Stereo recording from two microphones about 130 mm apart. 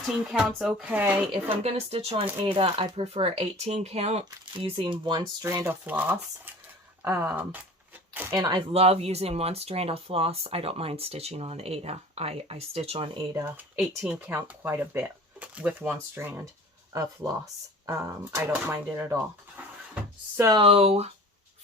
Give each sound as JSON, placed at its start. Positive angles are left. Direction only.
{"t": 0.3, "sound": "speech", "side_deg": -5}
{"t": 1.3, "sound": "speech", "side_deg": -50}
{"t": 4.6, "sound": "speech", "side_deg": -40}
{"t": 5.5, "sound": "speech", "side_deg": -20}
{"t": 8.4, "sound": "speech", "side_deg": -30}
{"t": 8.7, "sound": "speech", "side_deg": -50}
{"t": 13.7, "sound": "speech", "side_deg": -5}
{"t": 16.9, "sound": "speech", "side_deg": -25}
{"t": 19.5, "sound": "cupboard open or close", "side_deg": -10}
{"t": 20.6, "sound": "speech", "side_deg": -45}